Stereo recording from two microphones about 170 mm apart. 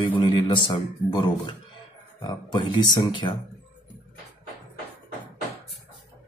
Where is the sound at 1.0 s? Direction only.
25° left (ahead or behind).